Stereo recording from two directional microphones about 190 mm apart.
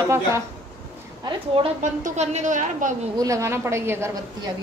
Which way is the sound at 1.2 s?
30° right (ahead or behind).